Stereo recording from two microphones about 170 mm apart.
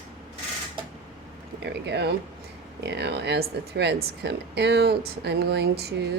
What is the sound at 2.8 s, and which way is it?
Speech, 80° right.